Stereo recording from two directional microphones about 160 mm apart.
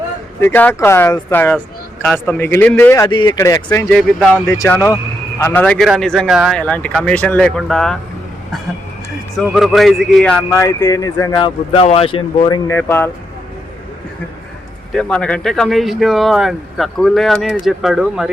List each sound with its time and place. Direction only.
0.3 s speech: 10° left (ahead or behind)
3.1 s speech: 30° left (ahead or behind)
3.8 s speech: centre (ahead or behind)
4.5 s speech: 15° left (ahead or behind)
5.6 s speech: 5° left (ahead or behind)
9.3 s speech: centre (ahead or behind)
10.5 s speech: 15° left (ahead or behind); by 12.5 s 35° left (ahead or behind)
12.5 s speech: 20° left (ahead or behind)
14.9 s speech: 5° left (ahead or behind)